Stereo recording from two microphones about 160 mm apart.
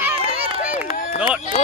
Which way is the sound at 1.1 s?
10° right (ahead or behind).